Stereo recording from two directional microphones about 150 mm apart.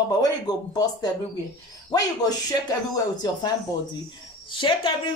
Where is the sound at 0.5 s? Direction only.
25° left (ahead or behind).